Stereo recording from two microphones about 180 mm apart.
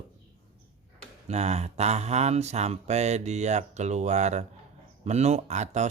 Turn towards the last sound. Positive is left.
turn(degrees=-40)  # may be behind; listen again after turning